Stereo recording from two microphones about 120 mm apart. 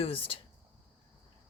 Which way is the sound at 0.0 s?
50° left (ahead or behind).